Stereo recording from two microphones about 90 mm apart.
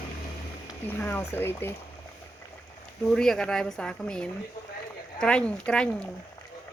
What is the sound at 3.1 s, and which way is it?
Speech, 5° left (ahead or behind).